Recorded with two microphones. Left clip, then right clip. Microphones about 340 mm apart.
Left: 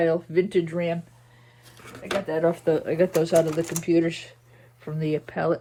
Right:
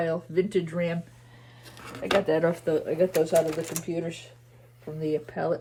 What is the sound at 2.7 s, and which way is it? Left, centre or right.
Speech, centre.